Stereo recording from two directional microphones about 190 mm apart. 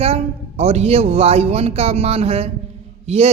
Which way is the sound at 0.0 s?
30° right (ahead or behind).